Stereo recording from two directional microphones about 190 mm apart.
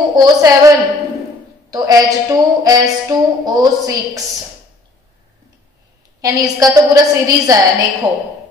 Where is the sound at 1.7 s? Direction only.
20° right (ahead or behind).